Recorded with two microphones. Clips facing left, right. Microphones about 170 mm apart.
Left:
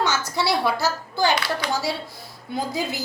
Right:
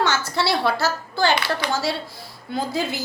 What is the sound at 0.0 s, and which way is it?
A woman's voice, 15° left (ahead or behind).